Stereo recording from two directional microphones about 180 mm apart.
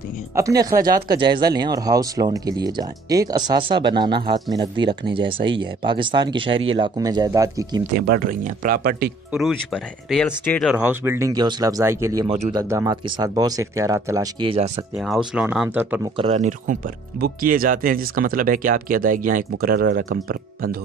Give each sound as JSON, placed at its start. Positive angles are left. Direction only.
{"t": 0.3, "sound": "speech", "side_deg": -20}
{"t": 0.7, "sound": "speech", "side_deg": -55}
{"t": 1.0, "sound": "speech", "side_deg": -25}
{"t": 8.1, "sound": "speech", "side_deg": -50}
{"t": 9.3, "sound": "speech", "side_deg": 0}
{"t": 10.6, "sound": "speech", "side_deg": -5}
{"t": 12.3, "sound": "speech", "side_deg": -35}
{"t": 12.5, "sound": "speech", "side_deg": -15}
{"t": 15.3, "sound": "speech", "side_deg": -5}
{"t": 16.2, "sound": "speech", "side_deg": -40}